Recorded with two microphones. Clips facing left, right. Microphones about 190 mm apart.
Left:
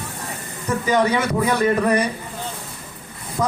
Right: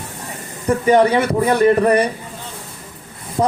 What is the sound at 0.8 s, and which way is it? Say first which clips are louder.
Speech: right 5 dB; 30° right (ahead or behind).